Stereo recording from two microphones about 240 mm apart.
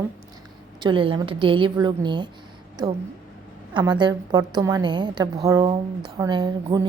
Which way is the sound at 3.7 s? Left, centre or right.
Centre.